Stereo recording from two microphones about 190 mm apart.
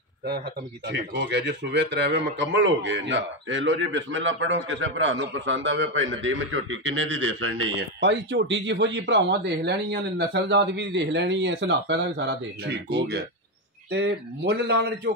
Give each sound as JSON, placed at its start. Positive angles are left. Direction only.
{"t": 0.8, "sound": "speech", "side_deg": -65}
{"t": 13.8, "sound": "speech", "side_deg": -60}